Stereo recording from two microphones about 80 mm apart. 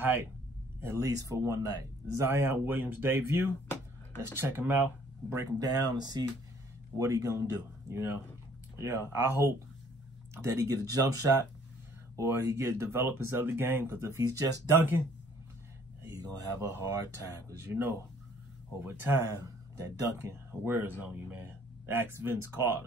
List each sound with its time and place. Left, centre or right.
0.0 s speech: right
2.1 s speech: right
5.3 s speech: right
7.0 s speech: right
16.1 s speech: right
18.8 s speech: right
19.2 s speech: right